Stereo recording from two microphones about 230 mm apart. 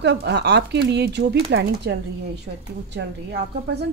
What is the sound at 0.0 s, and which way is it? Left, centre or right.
A woman's voice, right.